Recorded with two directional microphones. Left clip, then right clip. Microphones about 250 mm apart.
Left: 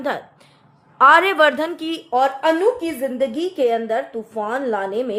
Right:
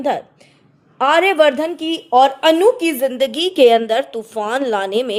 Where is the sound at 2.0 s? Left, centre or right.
Right.